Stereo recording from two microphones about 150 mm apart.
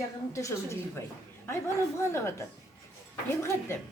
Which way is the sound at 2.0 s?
20° left (ahead or behind).